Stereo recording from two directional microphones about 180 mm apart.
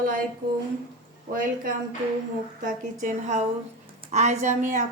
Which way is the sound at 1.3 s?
50° right (ahead or behind).